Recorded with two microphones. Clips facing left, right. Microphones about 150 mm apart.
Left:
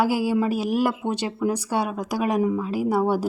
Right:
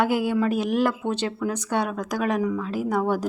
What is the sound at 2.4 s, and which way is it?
Speech, 25° left (ahead or behind).